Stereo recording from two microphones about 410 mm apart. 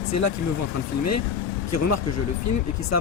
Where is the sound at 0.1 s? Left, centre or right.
Left.